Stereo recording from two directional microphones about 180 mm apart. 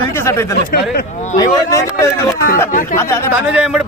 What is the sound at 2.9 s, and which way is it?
Speech, 15° left (ahead or behind).